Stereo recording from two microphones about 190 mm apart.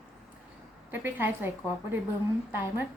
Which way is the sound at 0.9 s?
10° right (ahead or behind).